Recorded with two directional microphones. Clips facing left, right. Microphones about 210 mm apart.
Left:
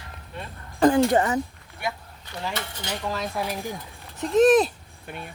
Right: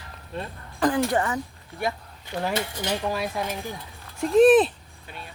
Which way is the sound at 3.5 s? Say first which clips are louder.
Left 1 dB; 10° left (ahead or behind).